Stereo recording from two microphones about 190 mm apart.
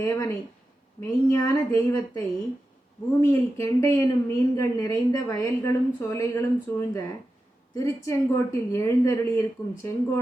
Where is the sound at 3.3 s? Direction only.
15° left (ahead or behind).